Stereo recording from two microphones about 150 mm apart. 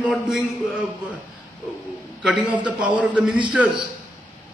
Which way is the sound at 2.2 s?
5° right (ahead or behind).